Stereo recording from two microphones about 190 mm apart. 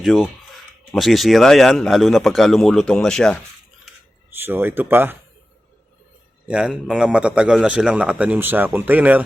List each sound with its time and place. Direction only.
0.0 s speech: centre (ahead or behind)
3.8 s camera: 10° right (ahead or behind)
6.5 s a man's voice: 5° right (ahead or behind)